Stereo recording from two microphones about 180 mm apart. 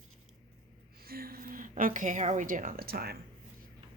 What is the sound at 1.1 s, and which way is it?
A woman's voice, 55° right (ahead or behind).